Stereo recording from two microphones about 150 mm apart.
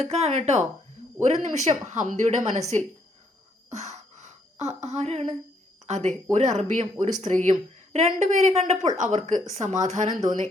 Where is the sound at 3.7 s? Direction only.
50° right (ahead or behind).